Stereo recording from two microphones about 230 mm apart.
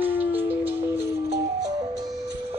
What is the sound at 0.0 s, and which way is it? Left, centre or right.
Music, centre.